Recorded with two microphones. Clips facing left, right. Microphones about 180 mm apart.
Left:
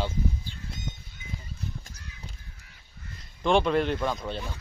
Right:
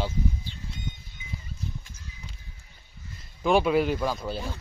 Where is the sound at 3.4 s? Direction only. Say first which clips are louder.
Right 1 dB; 5° right (ahead or behind).